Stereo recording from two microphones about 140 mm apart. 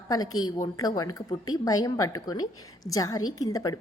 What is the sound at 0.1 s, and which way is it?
A woman's voice, 30° left (ahead or behind).